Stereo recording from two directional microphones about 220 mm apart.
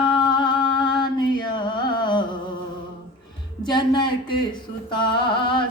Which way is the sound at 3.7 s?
20° left (ahead or behind).